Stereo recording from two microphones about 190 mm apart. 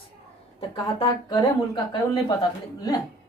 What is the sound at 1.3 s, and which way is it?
Speech, 25° left (ahead or behind).